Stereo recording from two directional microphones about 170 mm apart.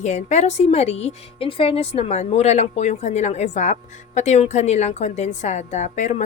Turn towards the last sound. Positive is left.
turn(degrees=45)  # may be behind; listen again after turning